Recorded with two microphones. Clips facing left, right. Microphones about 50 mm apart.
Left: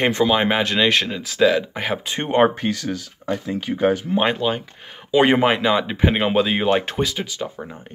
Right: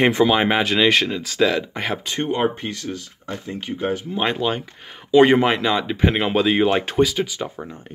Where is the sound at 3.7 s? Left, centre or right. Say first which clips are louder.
Left 2 dB; left.